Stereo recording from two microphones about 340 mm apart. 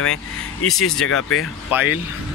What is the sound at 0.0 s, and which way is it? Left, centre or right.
Vehicle, left.